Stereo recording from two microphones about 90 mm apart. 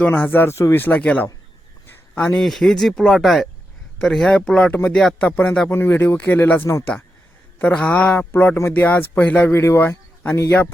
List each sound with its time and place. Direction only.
0.0 s a man's voice: 20° left (ahead or behind)
2.4 s speech: 5° left (ahead or behind)
5.6 s speech: 25° left (ahead or behind)
7.6 s speech: 15° left (ahead or behind)
9.5 s speech: 30° left (ahead or behind)